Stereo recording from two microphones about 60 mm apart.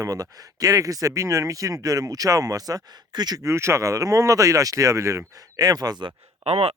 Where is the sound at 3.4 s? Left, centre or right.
Right.